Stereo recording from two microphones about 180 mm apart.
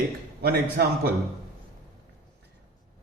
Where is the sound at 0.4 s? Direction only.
60° right (ahead or behind).